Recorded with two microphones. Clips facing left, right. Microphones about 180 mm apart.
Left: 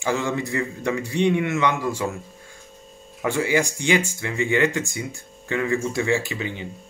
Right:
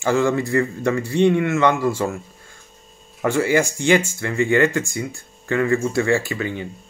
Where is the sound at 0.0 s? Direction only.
15° left (ahead or behind).